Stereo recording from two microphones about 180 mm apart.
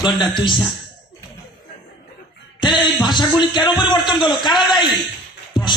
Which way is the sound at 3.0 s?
25° left (ahead or behind).